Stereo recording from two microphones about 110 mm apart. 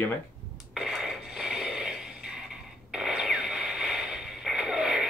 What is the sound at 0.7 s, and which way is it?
Wheeze, centre (ahead or behind).